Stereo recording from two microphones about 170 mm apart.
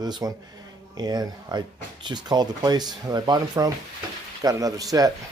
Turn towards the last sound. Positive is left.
turn(degrees=-20)  # may be behind; listen again after turning